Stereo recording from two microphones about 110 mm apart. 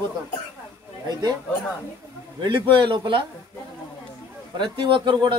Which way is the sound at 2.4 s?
45° right (ahead or behind).